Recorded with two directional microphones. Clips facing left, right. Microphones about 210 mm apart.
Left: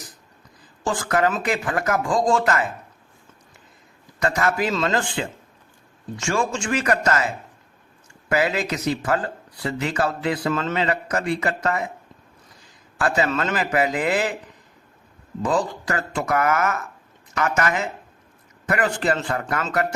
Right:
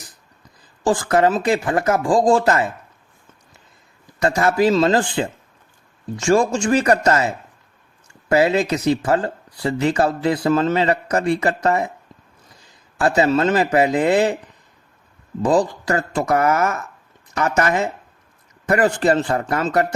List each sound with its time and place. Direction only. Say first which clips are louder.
0.9 s speech: right 5 dB; 30° right (ahead or behind)
4.2 s speech: right 5 dB; 30° right (ahead or behind)
8.3 s speech: right 6 dB; 30° right (ahead or behind)
13.0 s speech: right 6 dB; 30° right (ahead or behind)
15.4 s speech: right 5 dB; 35° right (ahead or behind)